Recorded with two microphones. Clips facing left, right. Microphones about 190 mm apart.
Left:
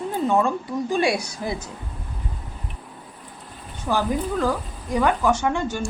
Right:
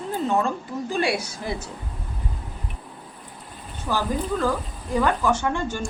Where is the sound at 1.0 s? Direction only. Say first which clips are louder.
Left 1 dB; 15° left (ahead or behind).